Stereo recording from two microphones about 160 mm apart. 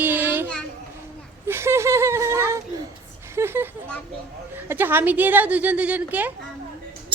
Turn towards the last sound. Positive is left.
turn(degrees=-10)  # may be behind; listen again after turning